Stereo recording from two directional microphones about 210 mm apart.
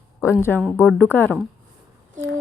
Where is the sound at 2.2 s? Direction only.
65° right (ahead or behind).